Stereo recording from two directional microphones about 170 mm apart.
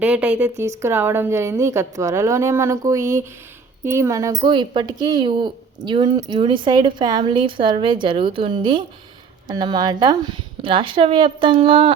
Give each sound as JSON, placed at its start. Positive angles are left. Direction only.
{"t": 0.0, "sound": "a woman's voice", "side_deg": -10}